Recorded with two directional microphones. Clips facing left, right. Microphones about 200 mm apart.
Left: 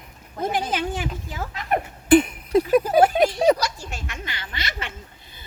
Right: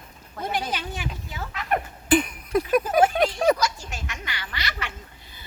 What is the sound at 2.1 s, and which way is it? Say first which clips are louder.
Speech: left 5 dB; 25° left (ahead or behind).